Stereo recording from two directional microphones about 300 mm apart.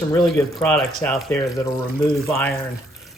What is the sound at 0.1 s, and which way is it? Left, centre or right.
Speech, centre.